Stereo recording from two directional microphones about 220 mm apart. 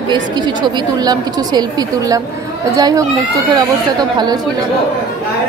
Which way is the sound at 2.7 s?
15° right (ahead or behind).